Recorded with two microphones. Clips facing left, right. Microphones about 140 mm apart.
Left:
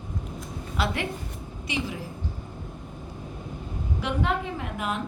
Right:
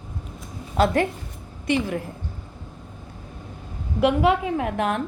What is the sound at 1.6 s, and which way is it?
Speech, 55° right (ahead or behind).